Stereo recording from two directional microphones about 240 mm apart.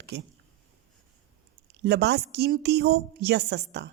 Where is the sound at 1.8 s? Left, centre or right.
Right.